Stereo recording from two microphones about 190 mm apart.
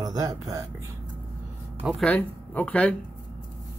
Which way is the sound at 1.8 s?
Centre (ahead or behind).